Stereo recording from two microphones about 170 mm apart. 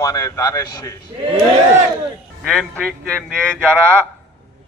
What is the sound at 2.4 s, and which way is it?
A man's voice, 5° left (ahead or behind).